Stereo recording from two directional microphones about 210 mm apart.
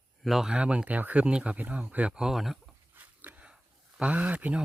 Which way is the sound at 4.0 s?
5° right (ahead or behind).